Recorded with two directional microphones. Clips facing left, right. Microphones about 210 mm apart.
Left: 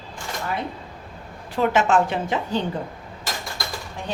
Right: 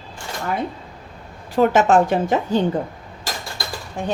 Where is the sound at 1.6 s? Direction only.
40° right (ahead or behind).